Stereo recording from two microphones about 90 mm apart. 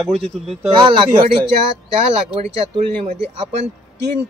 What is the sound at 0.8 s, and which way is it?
Speech, 60° right (ahead or behind).